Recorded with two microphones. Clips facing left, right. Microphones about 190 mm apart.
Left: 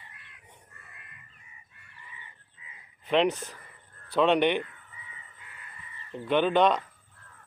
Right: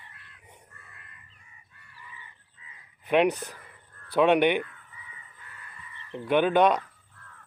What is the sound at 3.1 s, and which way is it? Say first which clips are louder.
Speech: right 2 dB; 15° right (ahead or behind).